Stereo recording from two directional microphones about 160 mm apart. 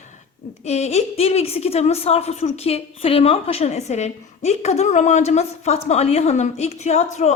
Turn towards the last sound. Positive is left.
turn(degrees=45)  # may be behind; listen again after turning